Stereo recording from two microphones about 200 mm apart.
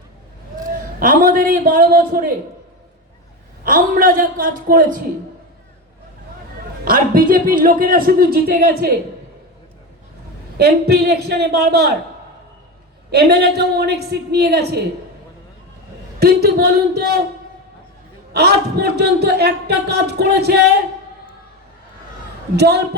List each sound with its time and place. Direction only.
0.7 s a man's voice: 45° right (ahead or behind)
3.6 s a man's voice: 45° right (ahead or behind)
6.8 s a man's voice: 45° right (ahead or behind)
10.6 s a man's voice: 55° right (ahead or behind)
13.1 s a man's voice: 55° right (ahead or behind)
16.2 s a man's voice: 50° right (ahead or behind)
18.3 s a man's voice: 55° right (ahead or behind)
22.5 s a man's voice: 55° right (ahead or behind)